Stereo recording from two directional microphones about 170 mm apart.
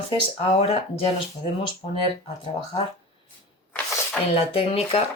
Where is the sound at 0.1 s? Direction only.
35° left (ahead or behind).